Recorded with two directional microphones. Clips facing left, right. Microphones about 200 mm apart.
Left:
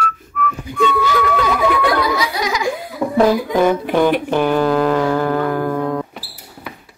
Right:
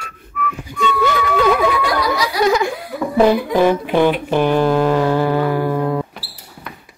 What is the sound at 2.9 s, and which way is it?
Chuckle, 60° right (ahead or behind).